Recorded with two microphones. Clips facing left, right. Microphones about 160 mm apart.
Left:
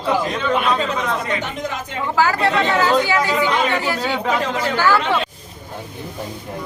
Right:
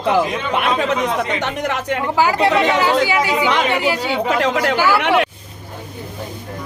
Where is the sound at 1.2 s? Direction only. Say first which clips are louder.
Right 3 dB; 75° right (ahead or behind).